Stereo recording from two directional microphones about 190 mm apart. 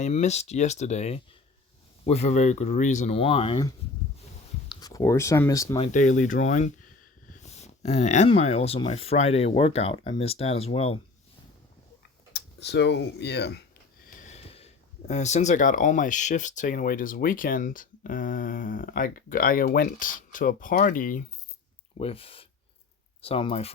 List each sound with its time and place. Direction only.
0.0 s speech: 35° left (ahead or behind)
4.7 s speech: 20° left (ahead or behind)
5.7 s speech: 35° left (ahead or behind)
12.3 s speech: 65° left (ahead or behind)
14.2 s speech: 35° left (ahead or behind)
21.9 s speech: 30° left (ahead or behind)